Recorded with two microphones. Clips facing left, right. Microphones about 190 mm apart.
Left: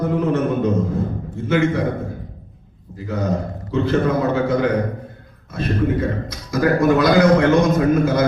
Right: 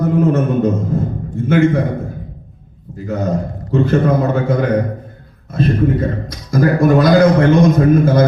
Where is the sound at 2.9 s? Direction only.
50° right (ahead or behind).